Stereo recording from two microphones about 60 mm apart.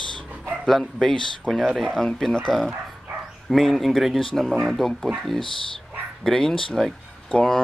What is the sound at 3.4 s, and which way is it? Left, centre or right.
Speech, centre.